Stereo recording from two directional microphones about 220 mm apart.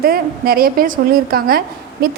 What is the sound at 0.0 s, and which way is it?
A woman's voice, 45° right (ahead or behind).